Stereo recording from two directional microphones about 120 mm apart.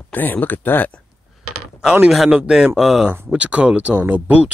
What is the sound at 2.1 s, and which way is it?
Speech, centre (ahead or behind).